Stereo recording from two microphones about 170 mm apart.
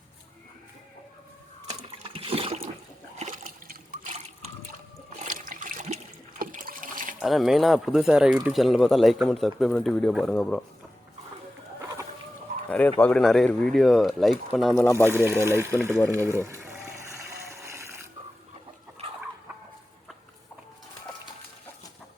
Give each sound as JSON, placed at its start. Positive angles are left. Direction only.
{"t": 2.0, "sound": "toilet flush", "side_deg": -35}
{"t": 3.2, "sound": "water", "side_deg": -50}
{"t": 5.2, "sound": "toilet flush", "side_deg": -50}
{"t": 6.4, "sound": "water", "side_deg": -55}
{"t": 7.2, "sound": "speech", "side_deg": 0}
{"t": 12.6, "sound": "speech", "side_deg": 10}
{"t": 15.1, "sound": "speech", "side_deg": -15}
{"t": 16.1, "sound": "gush", "side_deg": -15}
{"t": 17.5, "sound": "water", "side_deg": -15}